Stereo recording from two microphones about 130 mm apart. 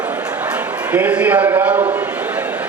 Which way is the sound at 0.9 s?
10° right (ahead or behind).